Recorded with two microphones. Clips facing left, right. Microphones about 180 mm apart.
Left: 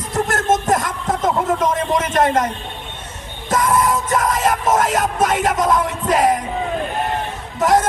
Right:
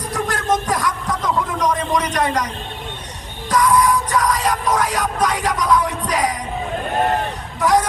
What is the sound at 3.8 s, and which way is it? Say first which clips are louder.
Music: even; 25° left (ahead or behind).